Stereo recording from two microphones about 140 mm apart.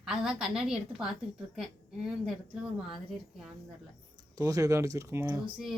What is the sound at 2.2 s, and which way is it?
Speech, 5° right (ahead or behind).